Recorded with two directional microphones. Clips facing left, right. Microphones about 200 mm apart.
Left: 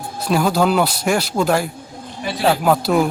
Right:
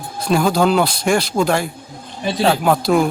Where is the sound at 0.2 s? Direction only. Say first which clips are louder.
Right 1 dB; 5° left (ahead or behind).